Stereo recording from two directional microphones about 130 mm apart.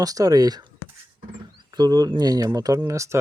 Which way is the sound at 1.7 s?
30° right (ahead or behind).